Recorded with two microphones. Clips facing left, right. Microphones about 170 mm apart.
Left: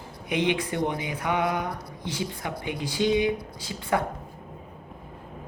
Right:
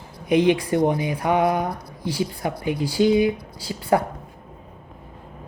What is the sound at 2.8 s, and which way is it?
Speech, 35° right (ahead or behind).